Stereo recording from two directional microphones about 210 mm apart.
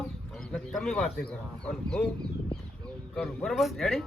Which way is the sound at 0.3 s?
Centre (ahead or behind).